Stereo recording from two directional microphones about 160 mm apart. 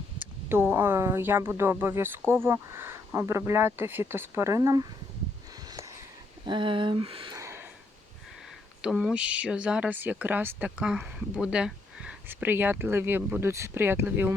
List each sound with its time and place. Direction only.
0.2 s speech: 10° right (ahead or behind)
6.4 s speech: 30° right (ahead or behind)
7.3 s a sound: 15° right (ahead or behind)
8.8 s speech: 5° right (ahead or behind)